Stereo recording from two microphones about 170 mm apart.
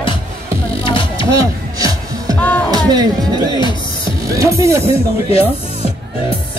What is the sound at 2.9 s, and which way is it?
Speech, 20° right (ahead or behind).